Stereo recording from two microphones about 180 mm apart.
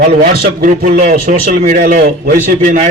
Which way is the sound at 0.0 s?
50° right (ahead or behind).